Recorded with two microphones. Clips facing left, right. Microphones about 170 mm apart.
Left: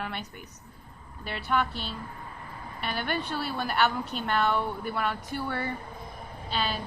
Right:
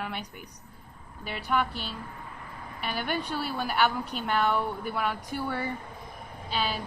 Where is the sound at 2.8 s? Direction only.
10° right (ahead or behind).